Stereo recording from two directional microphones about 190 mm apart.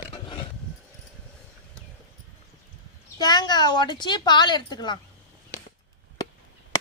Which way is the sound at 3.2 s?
20° left (ahead or behind).